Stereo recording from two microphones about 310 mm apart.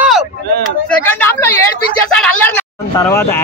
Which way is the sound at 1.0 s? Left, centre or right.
Centre.